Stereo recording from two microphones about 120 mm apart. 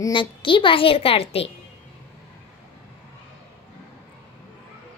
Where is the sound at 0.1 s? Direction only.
45° left (ahead or behind).